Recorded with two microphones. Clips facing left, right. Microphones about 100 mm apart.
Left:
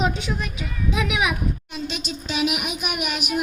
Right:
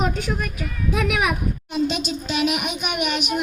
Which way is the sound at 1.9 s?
50° right (ahead or behind).